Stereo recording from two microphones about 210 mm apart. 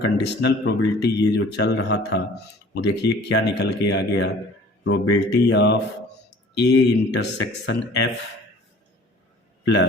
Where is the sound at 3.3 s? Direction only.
55° left (ahead or behind).